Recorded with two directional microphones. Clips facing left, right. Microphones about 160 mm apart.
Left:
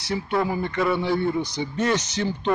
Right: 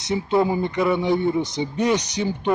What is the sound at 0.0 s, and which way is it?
A man's voice, 20° right (ahead or behind).